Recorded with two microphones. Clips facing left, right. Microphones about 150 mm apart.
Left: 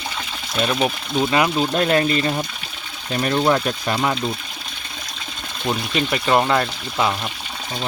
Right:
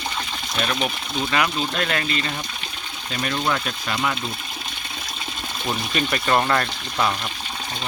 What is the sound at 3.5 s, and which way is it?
Speech, 35° left (ahead or behind).